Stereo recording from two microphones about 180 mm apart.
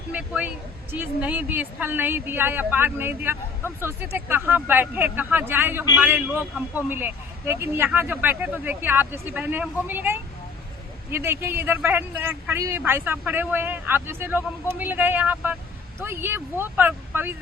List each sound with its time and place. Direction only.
0.1 s speech: 5° right (ahead or behind)